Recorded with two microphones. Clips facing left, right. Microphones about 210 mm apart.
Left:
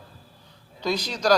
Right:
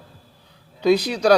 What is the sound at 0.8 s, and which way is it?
Speech, 60° right (ahead or behind).